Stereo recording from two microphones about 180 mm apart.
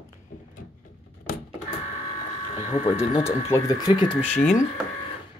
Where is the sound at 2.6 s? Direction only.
35° left (ahead or behind).